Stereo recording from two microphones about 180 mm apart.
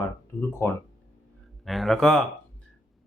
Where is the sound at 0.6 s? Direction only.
15° left (ahead or behind).